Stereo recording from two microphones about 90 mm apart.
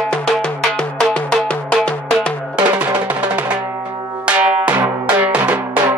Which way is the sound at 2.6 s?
15° right (ahead or behind).